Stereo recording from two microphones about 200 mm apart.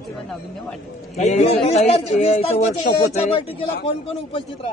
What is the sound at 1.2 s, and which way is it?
A man's voice, 35° left (ahead or behind).